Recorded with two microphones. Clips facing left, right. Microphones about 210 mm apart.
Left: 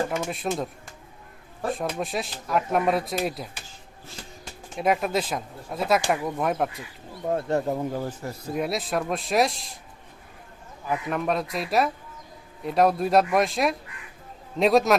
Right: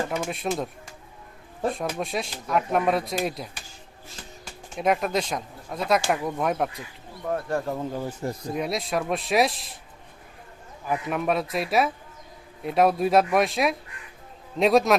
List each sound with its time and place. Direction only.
0.3 s speech: centre (ahead or behind)
1.7 s speech: centre (ahead or behind)
4.8 s speech: centre (ahead or behind)
7.3 s speech: 25° left (ahead or behind)
8.2 s speech: 25° right (ahead or behind)
8.5 s speech: centre (ahead or behind)
10.8 s speech: 5° right (ahead or behind)